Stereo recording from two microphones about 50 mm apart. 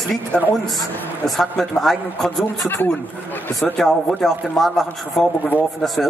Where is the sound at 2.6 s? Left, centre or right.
Left.